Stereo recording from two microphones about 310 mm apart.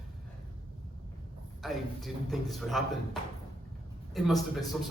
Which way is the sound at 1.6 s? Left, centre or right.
Centre.